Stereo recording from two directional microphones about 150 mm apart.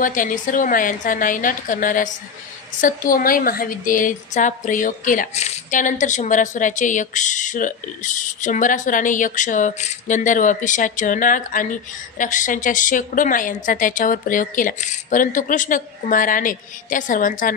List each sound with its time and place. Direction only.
0.0 s a woman's voice: 60° left (ahead or behind)